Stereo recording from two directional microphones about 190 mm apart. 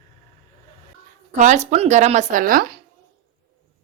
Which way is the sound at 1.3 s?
40° right (ahead or behind).